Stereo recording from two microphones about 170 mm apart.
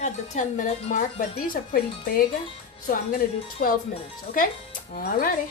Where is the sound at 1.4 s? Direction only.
55° left (ahead or behind).